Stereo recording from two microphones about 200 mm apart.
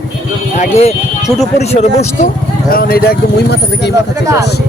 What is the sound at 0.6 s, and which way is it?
Speech, 35° left (ahead or behind).